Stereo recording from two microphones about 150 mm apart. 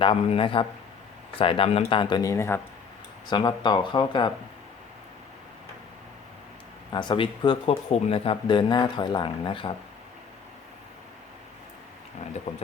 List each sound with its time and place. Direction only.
0.0 s speech: 35° left (ahead or behind); by 2.6 s 20° left (ahead or behind)
3.2 s speech: 30° left (ahead or behind)
7.1 s speech: 30° left (ahead or behind)
12.2 s speech: 50° left (ahead or behind)